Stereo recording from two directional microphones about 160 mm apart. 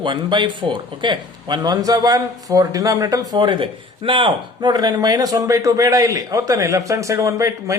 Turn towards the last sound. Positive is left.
turn(degrees=-20)  # may be behind; listen again after turning